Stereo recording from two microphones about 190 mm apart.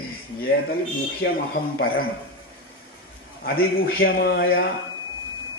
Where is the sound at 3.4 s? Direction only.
55° left (ahead or behind).